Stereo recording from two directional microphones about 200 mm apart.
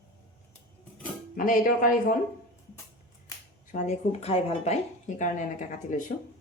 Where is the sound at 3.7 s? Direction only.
35° left (ahead or behind).